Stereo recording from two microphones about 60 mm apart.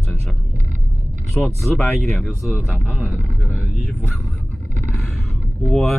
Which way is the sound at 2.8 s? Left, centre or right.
Centre.